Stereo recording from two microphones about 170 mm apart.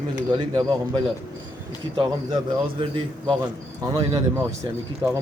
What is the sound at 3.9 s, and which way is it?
Speech, 20° right (ahead or behind).